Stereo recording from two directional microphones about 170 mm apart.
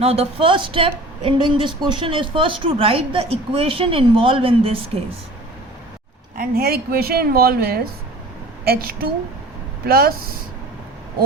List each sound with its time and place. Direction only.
0.0 s speech: 35° right (ahead or behind)
6.3 s speech: 60° right (ahead or behind)